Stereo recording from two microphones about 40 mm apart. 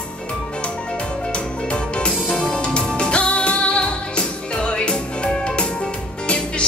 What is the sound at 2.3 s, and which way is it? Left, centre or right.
Music, left.